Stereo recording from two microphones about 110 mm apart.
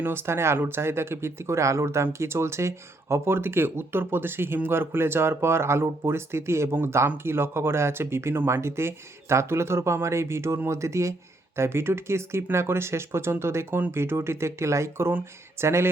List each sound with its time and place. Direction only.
0.0 s speech: 20° right (ahead or behind)